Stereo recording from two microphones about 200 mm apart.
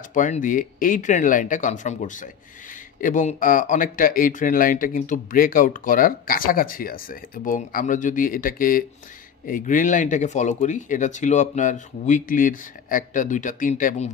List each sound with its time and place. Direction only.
0.1 s speech: 40° left (ahead or behind)